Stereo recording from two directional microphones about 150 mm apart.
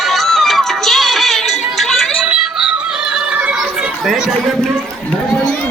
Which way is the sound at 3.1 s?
10° right (ahead or behind).